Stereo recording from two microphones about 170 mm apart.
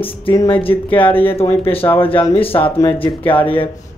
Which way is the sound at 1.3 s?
35° left (ahead or behind).